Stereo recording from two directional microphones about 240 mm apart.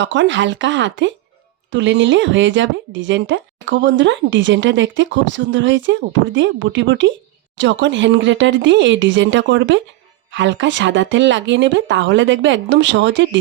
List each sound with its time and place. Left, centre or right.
0.0 s speech: right